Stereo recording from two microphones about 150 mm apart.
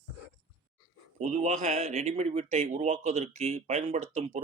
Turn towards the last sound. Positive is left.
turn(degrees=-45)  # may be behind; listen again after turning